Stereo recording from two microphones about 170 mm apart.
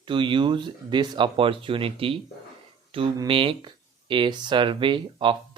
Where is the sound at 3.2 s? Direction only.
30° right (ahead or behind).